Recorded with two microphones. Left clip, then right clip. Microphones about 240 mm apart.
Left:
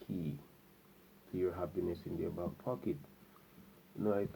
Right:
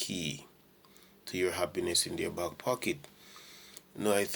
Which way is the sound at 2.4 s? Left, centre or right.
Right.